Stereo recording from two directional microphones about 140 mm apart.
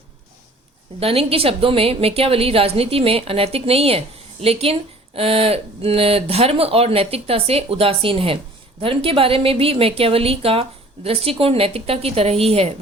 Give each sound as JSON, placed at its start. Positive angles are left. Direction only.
{"t": 0.9, "sound": "a woman's voice", "side_deg": -45}